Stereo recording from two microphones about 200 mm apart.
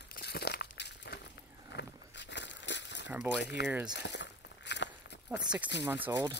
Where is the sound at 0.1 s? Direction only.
55° left (ahead or behind).